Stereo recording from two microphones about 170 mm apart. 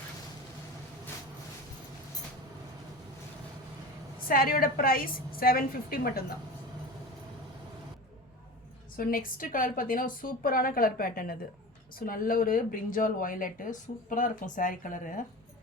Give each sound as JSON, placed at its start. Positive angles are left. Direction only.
{"t": 4.2, "sound": "a woman's voice", "side_deg": 55}
{"t": 9.0, "sound": "a woman's voice", "side_deg": 55}